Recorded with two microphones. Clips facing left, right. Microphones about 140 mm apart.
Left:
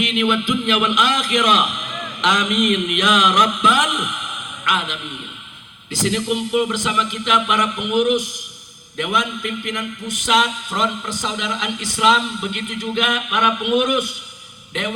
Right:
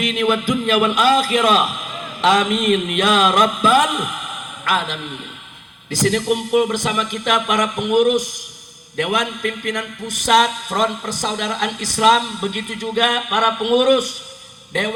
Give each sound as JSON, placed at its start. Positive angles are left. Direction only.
{"t": 0.0, "sound": "a man's voice", "side_deg": -40}